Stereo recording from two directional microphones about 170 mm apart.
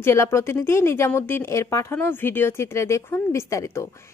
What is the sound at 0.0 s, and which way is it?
Speech, 15° left (ahead or behind).